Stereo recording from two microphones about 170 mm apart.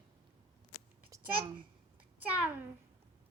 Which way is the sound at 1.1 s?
20° right (ahead or behind).